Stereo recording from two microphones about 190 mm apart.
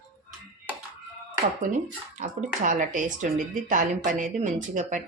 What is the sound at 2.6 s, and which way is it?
A woman's voice, 45° right (ahead or behind).